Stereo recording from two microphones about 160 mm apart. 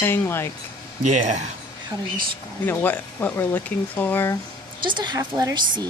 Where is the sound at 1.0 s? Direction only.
50° right (ahead or behind).